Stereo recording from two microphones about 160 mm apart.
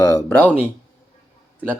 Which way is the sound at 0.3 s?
10° left (ahead or behind).